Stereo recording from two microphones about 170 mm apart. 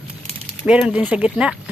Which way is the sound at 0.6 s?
5° right (ahead or behind).